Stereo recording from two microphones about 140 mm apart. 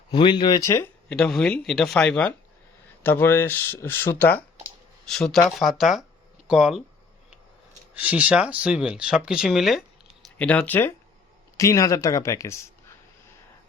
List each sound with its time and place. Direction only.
0.1 s speech: 35° left (ahead or behind)
1.1 s speech: 5° left (ahead or behind)
5.0 s speech: 5° left (ahead or behind)
7.9 s speech: 10° right (ahead or behind)
10.3 s speech: 10° left (ahead or behind)